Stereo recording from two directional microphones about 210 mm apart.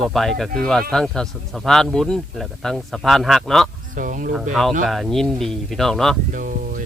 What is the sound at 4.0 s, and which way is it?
Speech, 40° right (ahead or behind).